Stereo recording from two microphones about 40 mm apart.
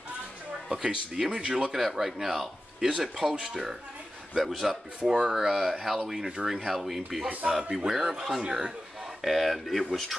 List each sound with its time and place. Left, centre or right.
0.7 s speech: right
1.8 s speech: centre
4.4 s speech: centre
5.0 s speech: centre
9.2 s speech: centre